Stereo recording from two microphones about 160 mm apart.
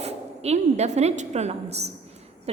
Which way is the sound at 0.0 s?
40° right (ahead or behind).